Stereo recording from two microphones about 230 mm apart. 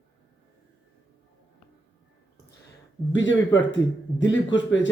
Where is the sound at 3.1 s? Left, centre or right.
Left.